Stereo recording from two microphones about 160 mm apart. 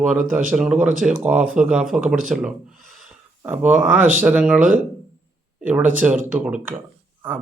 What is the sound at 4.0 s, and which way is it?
Speech, 55° right (ahead or behind).